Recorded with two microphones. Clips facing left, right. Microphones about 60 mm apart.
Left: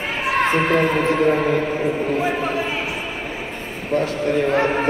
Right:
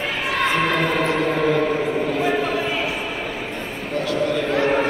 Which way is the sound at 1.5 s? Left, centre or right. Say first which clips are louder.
Right 2 dB; right.